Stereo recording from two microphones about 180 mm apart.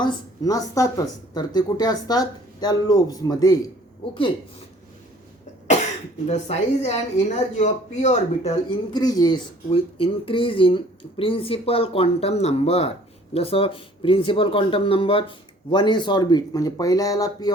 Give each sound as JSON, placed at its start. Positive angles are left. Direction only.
{"t": 0.0, "sound": "speech", "side_deg": 20}
{"t": 6.2, "sound": "speech", "side_deg": 35}
{"t": 8.9, "sound": "speech", "side_deg": 20}